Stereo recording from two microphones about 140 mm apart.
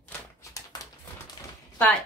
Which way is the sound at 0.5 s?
25° left (ahead or behind).